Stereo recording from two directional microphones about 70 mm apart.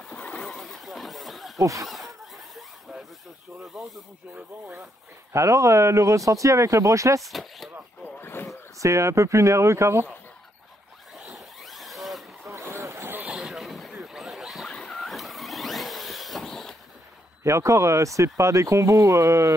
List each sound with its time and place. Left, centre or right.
0.0 s a sound: centre
1.6 s speech: right
1.9 s a sound: centre
3.6 s snake: centre
5.3 s speech: right
7.2 s speech: centre
8.0 s vehicle: left
8.7 s speech: right
11.1 s vehicle: centre
12.5 s vehicle: right
13.0 s a sound: right
13.3 s a sound: centre
14.7 s vehicle: centre
17.4 s speech: right